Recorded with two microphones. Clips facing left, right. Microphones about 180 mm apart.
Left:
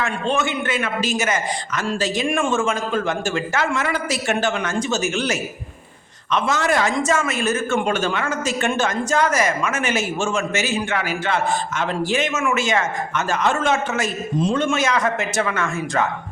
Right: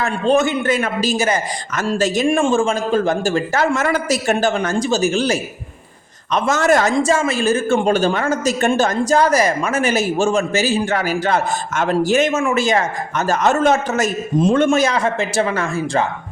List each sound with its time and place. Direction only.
0.0 s a woman's voice: 40° right (ahead or behind)
1.7 s a man's voice: 45° right (ahead or behind)
2.2 s a woman's voice: 30° right (ahead or behind)
6.3 s a man's voice: 45° right (ahead or behind)
6.9 s a woman's voice: 30° right (ahead or behind); by 14.8 s 50° right (ahead or behind)
14.8 s a woman's voice: 30° right (ahead or behind)